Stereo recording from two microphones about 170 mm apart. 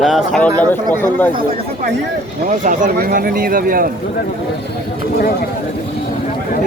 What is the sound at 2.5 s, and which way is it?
Speech, 50° right (ahead or behind).